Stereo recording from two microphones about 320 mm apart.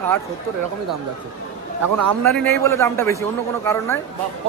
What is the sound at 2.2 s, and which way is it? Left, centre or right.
A man's voice, centre.